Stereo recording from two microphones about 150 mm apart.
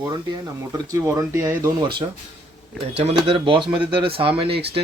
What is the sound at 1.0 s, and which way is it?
Speech, 20° right (ahead or behind).